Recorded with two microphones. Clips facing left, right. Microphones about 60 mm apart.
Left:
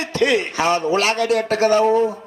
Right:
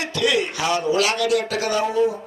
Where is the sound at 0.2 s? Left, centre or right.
Left.